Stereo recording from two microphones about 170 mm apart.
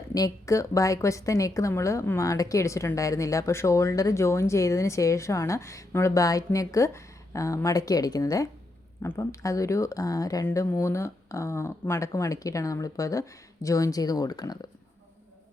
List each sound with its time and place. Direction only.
0.1 s a woman's voice: 20° left (ahead or behind)